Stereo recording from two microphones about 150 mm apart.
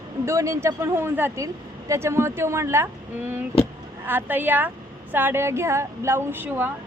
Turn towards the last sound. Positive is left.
turn(degrees=-15)  # may be behind; listen again after turning